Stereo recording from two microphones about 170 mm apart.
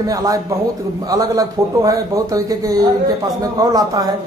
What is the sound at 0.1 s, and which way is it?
A man's voice, 20° right (ahead or behind).